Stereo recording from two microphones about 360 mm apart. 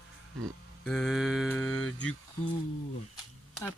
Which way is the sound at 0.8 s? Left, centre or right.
Centre.